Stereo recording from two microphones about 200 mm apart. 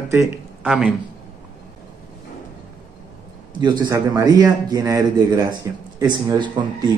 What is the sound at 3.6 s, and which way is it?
A man's voice, 20° right (ahead or behind).